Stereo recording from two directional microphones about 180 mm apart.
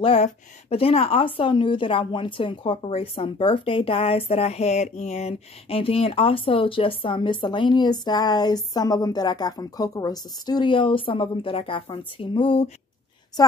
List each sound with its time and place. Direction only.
0.0 s a woman's voice: 35° left (ahead or behind)